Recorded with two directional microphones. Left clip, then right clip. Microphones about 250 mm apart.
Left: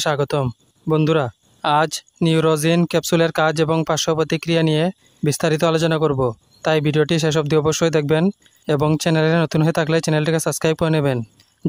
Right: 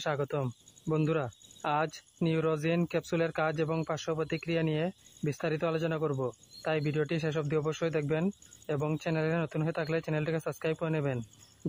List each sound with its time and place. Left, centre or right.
0.0 s speech: left